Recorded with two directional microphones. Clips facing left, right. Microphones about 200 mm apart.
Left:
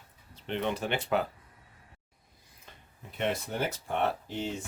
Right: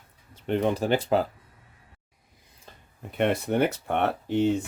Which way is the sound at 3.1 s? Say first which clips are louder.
Right 8 dB; 60° right (ahead or behind).